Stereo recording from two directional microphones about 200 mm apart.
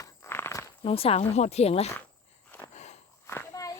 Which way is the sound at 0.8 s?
30° left (ahead or behind).